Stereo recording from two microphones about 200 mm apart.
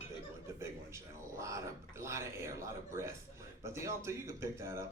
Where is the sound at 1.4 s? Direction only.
15° right (ahead or behind).